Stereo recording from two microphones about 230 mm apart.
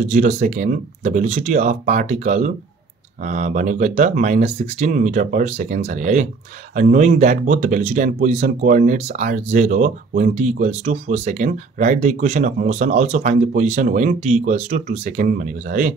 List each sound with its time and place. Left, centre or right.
0.0 s speech: right